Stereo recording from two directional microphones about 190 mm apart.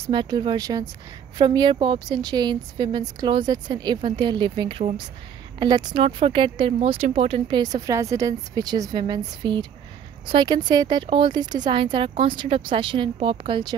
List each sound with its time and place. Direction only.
0.0 s speech: 25° right (ahead or behind)